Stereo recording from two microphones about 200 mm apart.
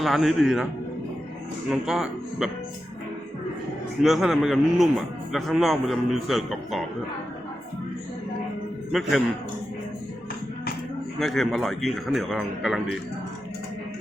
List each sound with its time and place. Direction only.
0.0 s a man's voice: centre (ahead or behind)
1.7 s a man's voice: centre (ahead or behind)
4.0 s a man's voice: centre (ahead or behind)
8.9 s a man's voice: centre (ahead or behind)
11.2 s a man's voice: centre (ahead or behind)